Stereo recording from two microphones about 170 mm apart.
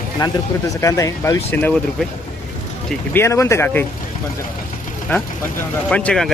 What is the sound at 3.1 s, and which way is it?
Speech, 15° left (ahead or behind).